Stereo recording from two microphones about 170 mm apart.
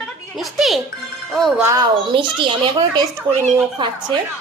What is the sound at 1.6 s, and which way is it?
Child singing, 20° right (ahead or behind).